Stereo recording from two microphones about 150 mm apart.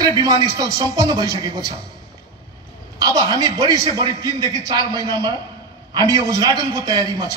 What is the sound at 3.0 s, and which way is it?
A man's voice, 25° right (ahead or behind).